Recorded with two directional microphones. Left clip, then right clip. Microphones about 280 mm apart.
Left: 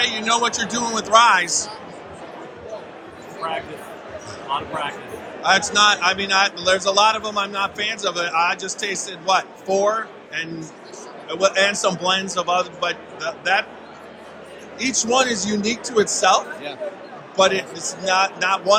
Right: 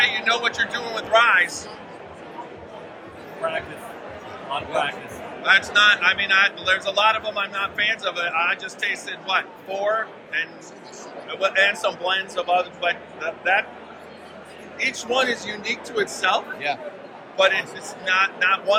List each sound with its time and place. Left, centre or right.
0.0 s speech: centre
5.4 s speech: centre
14.8 s speech: left